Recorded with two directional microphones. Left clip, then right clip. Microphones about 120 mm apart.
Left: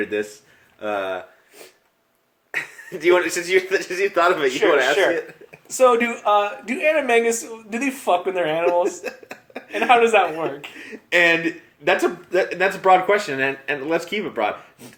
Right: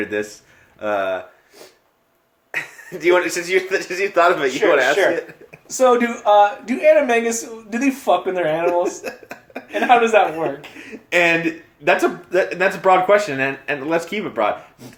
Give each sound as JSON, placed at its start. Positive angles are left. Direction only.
{"t": 0.1, "sound": "speech", "side_deg": 20}
{"t": 2.5, "sound": "speech", "side_deg": 25}
{"t": 5.6, "sound": "speech", "side_deg": 40}
{"t": 8.8, "sound": "speech", "side_deg": 15}
{"t": 9.9, "sound": "speech", "side_deg": 40}
{"t": 10.4, "sound": "speech", "side_deg": 15}